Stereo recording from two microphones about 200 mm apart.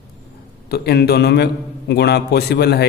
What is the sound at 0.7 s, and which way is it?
A man's voice, 50° left (ahead or behind).